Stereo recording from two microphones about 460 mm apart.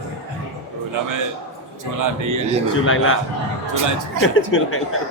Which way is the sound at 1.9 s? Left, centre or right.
Right.